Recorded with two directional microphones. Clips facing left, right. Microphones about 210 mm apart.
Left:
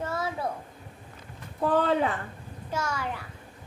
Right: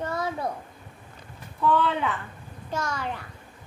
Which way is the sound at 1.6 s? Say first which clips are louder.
Even; 40° left (ahead or behind).